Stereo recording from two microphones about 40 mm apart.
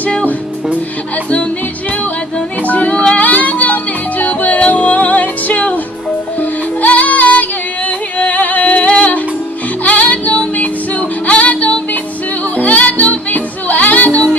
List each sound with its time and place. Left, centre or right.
2.6 s music: left
3.2 s music: left
6.8 s music: left